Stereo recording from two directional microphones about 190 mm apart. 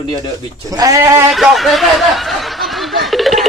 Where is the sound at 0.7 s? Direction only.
20° right (ahead or behind).